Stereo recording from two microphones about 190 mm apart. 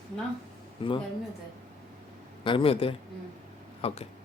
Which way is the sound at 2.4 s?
25° left (ahead or behind).